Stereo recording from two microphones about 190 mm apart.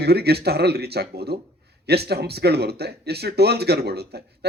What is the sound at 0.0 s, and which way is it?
A man's voice, 55° right (ahead or behind).